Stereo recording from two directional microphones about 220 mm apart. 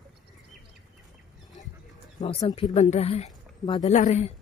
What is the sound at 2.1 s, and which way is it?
Speech, 30° left (ahead or behind).